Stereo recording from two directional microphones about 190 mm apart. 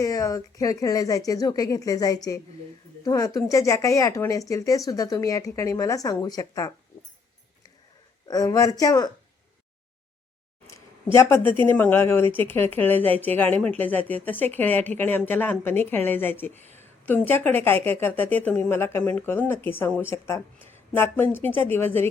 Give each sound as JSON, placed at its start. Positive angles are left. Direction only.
{"t": 0.0, "sound": "a woman's voice", "side_deg": 20}
{"t": 8.3, "sound": "speech", "side_deg": 20}
{"t": 10.7, "sound": "a woman's voice", "side_deg": 15}